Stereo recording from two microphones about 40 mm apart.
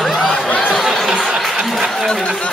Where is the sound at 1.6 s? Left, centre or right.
Centre.